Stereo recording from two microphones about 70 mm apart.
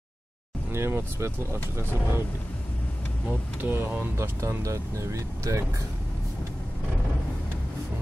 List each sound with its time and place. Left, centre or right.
0.7 s speech: right
3.3 s speech: right
4.2 s speech: right